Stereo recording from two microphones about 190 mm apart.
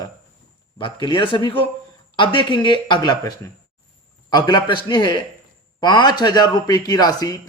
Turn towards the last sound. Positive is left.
turn(degrees=20)  # may be behind; listen again after turning